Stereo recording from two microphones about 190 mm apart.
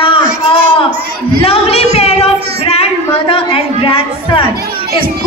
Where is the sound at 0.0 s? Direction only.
30° left (ahead or behind).